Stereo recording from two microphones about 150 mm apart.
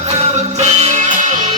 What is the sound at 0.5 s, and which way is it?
Music, 45° right (ahead or behind).